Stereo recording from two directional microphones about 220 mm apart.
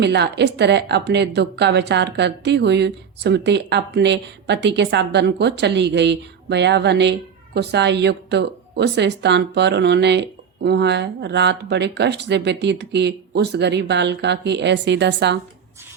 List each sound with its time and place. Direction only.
0.0 s a woman's voice: 50° right (ahead or behind)